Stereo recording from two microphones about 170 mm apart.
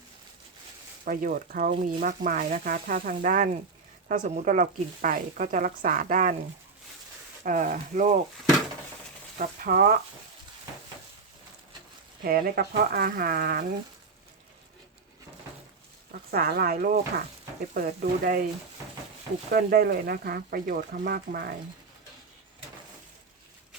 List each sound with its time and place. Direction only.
1.0 s speech: 55° right (ahead or behind)
7.4 s speech: 50° right (ahead or behind)
9.4 s speech: 60° right (ahead or behind)
12.2 s speech: 60° right (ahead or behind)
16.3 s speech: 60° right (ahead or behind)
19.5 s speech: 65° right (ahead or behind)